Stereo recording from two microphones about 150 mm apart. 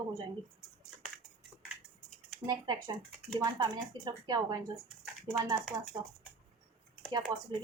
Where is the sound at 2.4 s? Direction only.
25° right (ahead or behind).